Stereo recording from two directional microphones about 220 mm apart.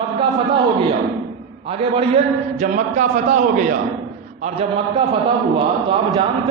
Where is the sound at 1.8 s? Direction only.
25° right (ahead or behind).